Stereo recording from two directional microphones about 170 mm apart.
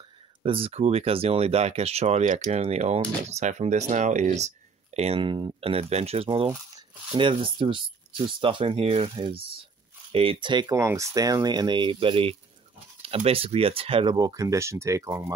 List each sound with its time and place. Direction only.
0.4 s speech: 35° right (ahead or behind); by 15.3 s 15° right (ahead or behind)